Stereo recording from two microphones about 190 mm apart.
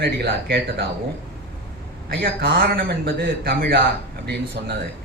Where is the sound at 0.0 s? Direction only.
55° right (ahead or behind).